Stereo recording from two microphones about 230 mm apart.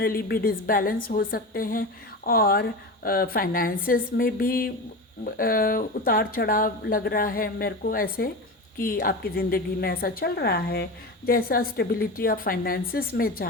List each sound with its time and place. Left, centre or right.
0.0 s a woman's voice: left